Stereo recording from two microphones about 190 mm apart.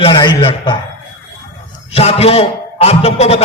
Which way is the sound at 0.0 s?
25° left (ahead or behind).